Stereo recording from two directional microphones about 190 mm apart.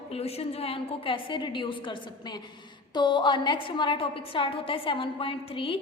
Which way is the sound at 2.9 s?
25° left (ahead or behind).